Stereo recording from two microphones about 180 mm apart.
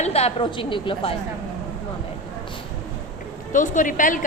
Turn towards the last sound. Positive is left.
turn(degrees=45)  # may be behind; listen again after turning